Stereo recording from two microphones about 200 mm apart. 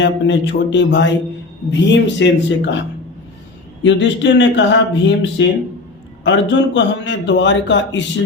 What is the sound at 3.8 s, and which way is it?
A man's voice, 65° left (ahead or behind).